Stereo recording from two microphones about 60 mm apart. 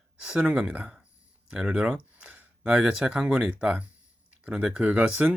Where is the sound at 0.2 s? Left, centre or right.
Centre.